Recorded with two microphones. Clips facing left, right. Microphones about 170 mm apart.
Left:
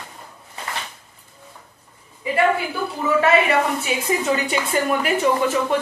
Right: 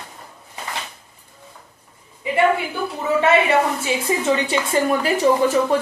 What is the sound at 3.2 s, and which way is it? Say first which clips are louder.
A woman's voice: right 2 dB; 25° right (ahead or behind).